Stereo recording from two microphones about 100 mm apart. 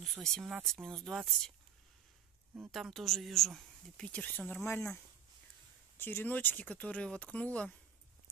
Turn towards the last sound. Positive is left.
turn(degrees=10)  # may be behind; listen again after turning